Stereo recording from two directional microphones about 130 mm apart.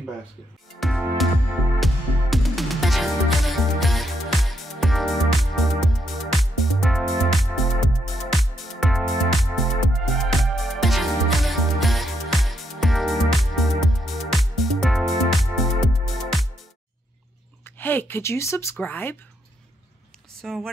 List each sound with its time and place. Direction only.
0.7 s music: centre (ahead or behind)
17.6 s speech: 15° left (ahead or behind)
20.4 s music: 5° left (ahead or behind)